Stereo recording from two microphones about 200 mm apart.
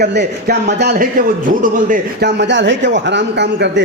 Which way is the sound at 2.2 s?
60° right (ahead or behind).